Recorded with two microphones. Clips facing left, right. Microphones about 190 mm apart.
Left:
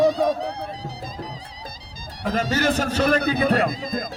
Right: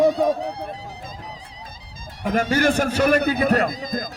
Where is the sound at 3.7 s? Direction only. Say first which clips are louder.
Even; 30° left (ahead or behind).